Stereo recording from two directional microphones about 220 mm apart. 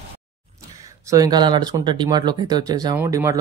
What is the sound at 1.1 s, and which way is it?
Speech, 15° right (ahead or behind).